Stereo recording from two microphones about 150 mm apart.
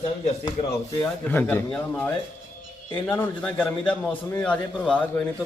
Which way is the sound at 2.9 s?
10° left (ahead or behind).